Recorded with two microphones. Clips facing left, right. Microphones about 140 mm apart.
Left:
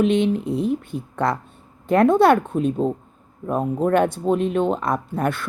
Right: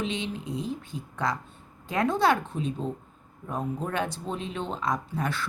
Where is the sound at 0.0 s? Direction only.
55° left (ahead or behind).